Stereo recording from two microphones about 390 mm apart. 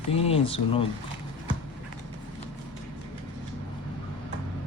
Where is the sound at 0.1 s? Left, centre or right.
Centre.